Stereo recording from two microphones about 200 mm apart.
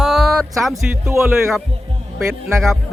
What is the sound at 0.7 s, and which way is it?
Speech, 15° right (ahead or behind).